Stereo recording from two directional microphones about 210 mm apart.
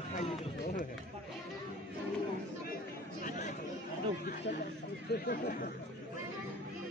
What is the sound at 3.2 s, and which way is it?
Chatter, 35° left (ahead or behind).